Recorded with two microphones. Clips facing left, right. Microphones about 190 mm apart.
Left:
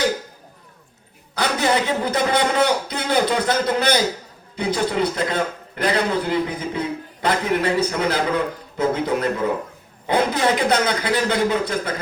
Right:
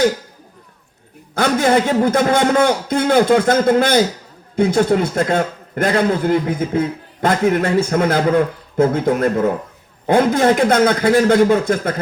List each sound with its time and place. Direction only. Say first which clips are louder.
1.4 s a man's voice: right 6 dB; 45° right (ahead or behind)